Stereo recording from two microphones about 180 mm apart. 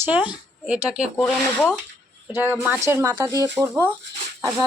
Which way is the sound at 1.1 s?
5° left (ahead or behind).